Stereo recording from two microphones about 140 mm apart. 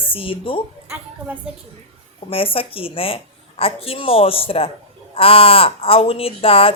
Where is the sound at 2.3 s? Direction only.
40° left (ahead or behind).